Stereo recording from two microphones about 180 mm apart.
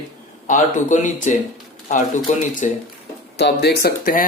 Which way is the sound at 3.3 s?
70° left (ahead or behind).